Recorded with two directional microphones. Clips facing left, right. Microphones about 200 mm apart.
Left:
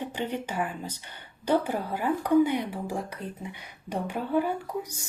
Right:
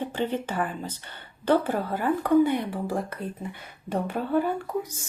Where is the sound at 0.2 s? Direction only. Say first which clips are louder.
Right 3 dB; 15° left (ahead or behind).